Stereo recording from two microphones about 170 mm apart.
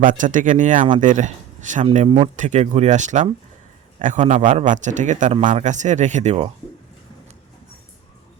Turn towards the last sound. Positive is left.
turn(degrees=-40)  # may be behind; listen again after turning